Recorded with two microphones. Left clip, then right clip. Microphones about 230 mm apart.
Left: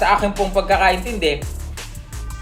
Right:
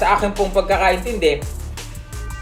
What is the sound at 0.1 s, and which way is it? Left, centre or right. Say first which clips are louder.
Speech: even; left.